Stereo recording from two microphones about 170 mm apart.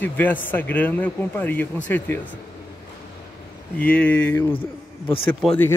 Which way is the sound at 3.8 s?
10° left (ahead or behind).